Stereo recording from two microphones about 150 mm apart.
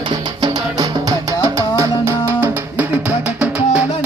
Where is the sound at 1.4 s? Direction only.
20° right (ahead or behind).